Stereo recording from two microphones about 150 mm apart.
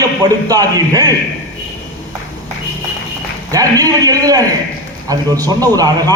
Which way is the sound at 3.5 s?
25° right (ahead or behind).